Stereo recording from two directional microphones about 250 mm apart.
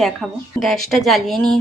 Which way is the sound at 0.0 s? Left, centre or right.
Centre.